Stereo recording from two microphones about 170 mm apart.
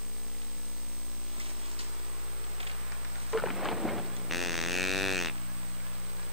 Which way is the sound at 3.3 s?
Centre (ahead or behind).